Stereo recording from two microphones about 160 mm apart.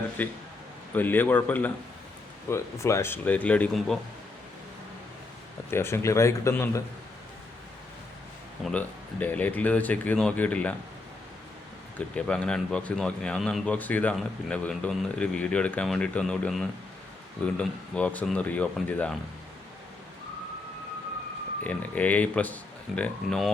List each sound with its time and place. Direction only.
0.2 s speech: 10° left (ahead or behind)
5.7 s speech: 15° left (ahead or behind)
8.6 s speech: centre (ahead or behind)
9.2 s speech: 10° left (ahead or behind)
11.9 s speech: 5° left (ahead or behind)
21.6 s speech: 10° left (ahead or behind)